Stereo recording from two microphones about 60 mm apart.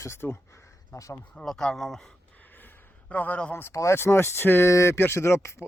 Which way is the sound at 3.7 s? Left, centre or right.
Left.